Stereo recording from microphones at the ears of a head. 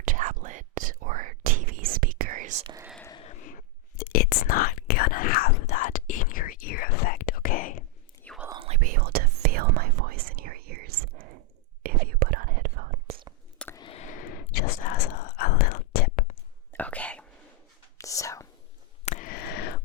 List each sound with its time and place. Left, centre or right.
0.0 s whispering: right
3.1 s whispering: left
8.4 s whispering: right
13.7 s whispering: left
16.8 s whispering: centre
19.0 s a sound: left